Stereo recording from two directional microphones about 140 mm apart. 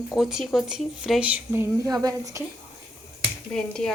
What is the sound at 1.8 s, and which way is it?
Speech, 25° right (ahead or behind).